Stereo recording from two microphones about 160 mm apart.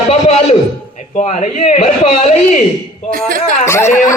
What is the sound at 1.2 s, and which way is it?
Speech, 45° left (ahead or behind).